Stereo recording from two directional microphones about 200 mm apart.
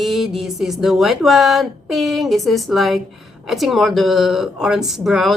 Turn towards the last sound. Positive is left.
turn(degrees=0)  # may be behind; listen again after turning